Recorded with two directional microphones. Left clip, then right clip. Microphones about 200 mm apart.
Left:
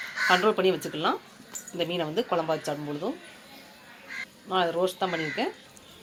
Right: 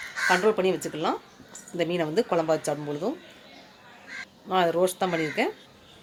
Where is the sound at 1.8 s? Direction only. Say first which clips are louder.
Right 3 dB; 25° right (ahead or behind).